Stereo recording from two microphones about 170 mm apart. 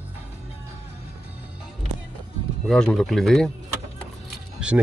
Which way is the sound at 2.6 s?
5° left (ahead or behind).